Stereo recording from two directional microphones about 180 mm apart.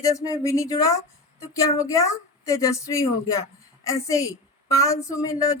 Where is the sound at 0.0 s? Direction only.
15° left (ahead or behind).